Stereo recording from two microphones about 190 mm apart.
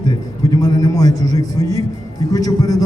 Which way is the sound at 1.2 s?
20° left (ahead or behind).